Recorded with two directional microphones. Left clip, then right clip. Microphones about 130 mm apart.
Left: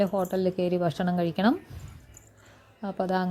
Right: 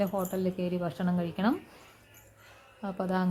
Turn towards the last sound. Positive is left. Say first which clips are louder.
# left 4 dB
turn(degrees=25)  # may be behind; listen again after turning